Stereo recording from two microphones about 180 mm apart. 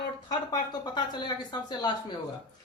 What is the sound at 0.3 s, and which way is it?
A woman's voice, 25° left (ahead or behind).